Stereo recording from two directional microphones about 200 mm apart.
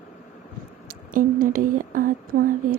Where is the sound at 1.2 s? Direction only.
40° right (ahead or behind).